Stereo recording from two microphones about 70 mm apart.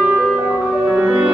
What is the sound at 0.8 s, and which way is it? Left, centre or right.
Music, centre.